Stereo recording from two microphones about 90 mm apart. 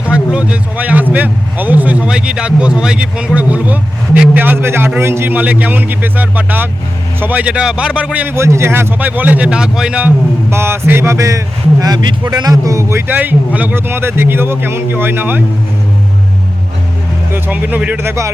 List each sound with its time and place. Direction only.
0.0 s a man's voice: 10° right (ahead or behind)
8.4 s a man's voice: 30° right (ahead or behind); by 10.1 s 10° right (ahead or behind)
10.5 s speech: 25° right (ahead or behind)
13.1 s a man's voice: 15° right (ahead or behind)
17.3 s a man's voice: 20° right (ahead or behind)